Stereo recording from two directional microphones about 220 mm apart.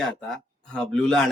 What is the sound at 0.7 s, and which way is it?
Speech, 5° left (ahead or behind).